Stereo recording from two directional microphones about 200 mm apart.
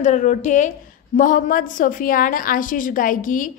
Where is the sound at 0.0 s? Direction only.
40° left (ahead or behind).